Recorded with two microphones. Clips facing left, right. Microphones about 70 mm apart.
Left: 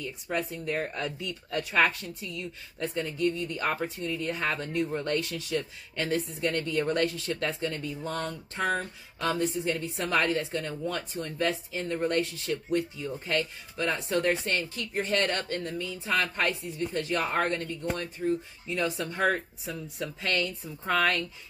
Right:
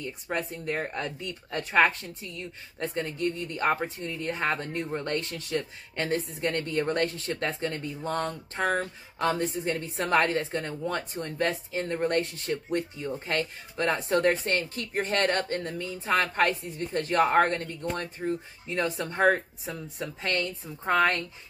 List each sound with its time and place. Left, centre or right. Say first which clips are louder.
0.0 s a woman's voice: even; right